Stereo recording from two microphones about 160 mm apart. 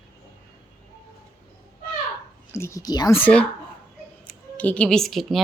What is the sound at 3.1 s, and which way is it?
Speech, 10° left (ahead or behind).